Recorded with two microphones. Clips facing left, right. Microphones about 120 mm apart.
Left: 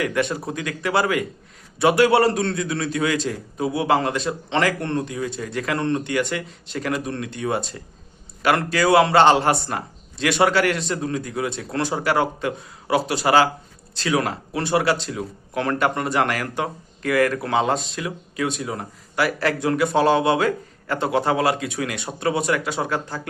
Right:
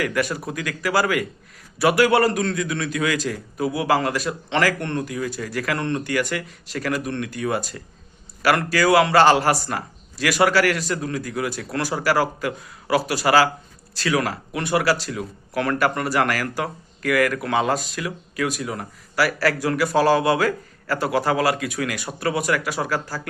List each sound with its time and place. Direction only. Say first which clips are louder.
0.0 s speech: left 1 dB; 25° left (ahead or behind)